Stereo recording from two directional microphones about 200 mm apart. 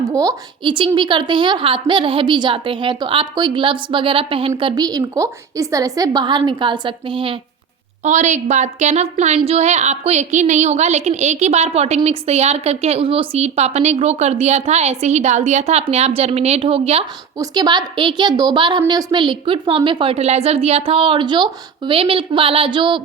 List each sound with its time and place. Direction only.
0.0 s a woman's voice: 15° right (ahead or behind)
8.0 s a woman's voice: 35° right (ahead or behind)
17.3 s a woman's voice: 20° right (ahead or behind)